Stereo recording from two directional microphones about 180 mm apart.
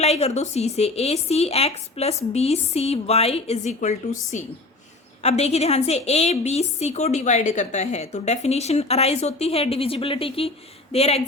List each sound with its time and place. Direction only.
0.0 s a woman's voice: 35° left (ahead or behind)
5.2 s a woman's voice: 35° left (ahead or behind)